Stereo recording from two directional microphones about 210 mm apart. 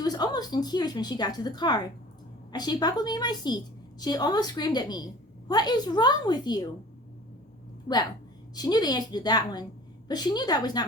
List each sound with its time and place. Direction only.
0.0 s a woman's voice: 20° left (ahead or behind)
8.5 s a woman's voice: 20° left (ahead or behind)